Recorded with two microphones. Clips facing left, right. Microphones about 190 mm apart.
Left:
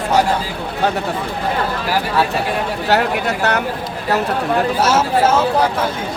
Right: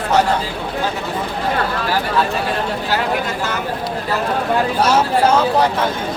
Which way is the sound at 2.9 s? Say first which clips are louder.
Left 5 dB; 70° left (ahead or behind).